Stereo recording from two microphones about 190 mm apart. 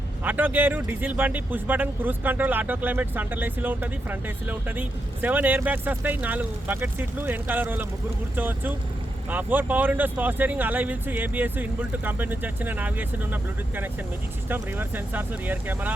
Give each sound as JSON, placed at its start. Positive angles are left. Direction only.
{"t": 0.3, "sound": "speech", "side_deg": -10}